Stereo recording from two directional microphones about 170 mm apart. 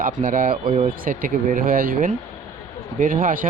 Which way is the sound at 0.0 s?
50° right (ahead or behind).